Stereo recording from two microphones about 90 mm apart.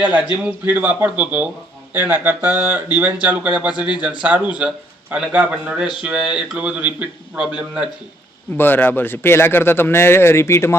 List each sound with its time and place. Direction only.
0.0 s a man's voice: 15° right (ahead or behind)
3.7 s speech: 60° left (ahead or behind)
4.2 s a man's voice: 15° right (ahead or behind)
8.5 s speech: 20° left (ahead or behind)